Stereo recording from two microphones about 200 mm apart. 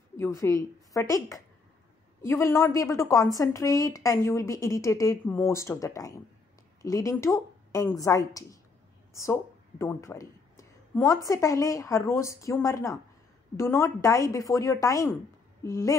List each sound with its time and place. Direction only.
0.2 s a woman's voice: 15° left (ahead or behind)
9.1 s a sound: 15° left (ahead or behind)
11.2 s a woman's voice: 15° left (ahead or behind)